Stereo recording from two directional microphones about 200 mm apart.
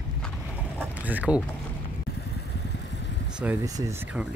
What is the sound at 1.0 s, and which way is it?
Speech, 10° right (ahead or behind).